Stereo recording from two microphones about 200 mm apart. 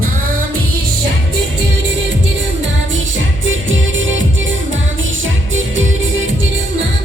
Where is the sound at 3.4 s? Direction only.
75° right (ahead or behind).